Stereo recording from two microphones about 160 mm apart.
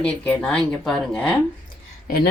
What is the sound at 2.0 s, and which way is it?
Speech, 70° left (ahead or behind).